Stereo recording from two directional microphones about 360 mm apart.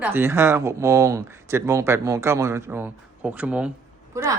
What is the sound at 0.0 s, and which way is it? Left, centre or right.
Speech, centre.